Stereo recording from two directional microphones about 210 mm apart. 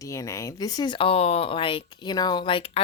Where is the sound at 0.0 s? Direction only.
15° left (ahead or behind).